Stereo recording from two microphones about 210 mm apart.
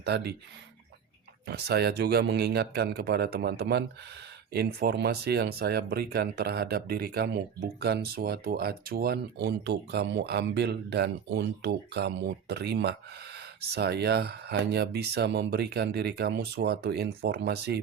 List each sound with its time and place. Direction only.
0.0 s speech: 50° right (ahead or behind)
1.5 s speech: 50° right (ahead or behind)